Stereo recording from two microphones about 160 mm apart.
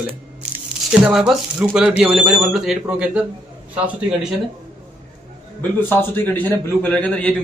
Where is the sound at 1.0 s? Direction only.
5° right (ahead or behind).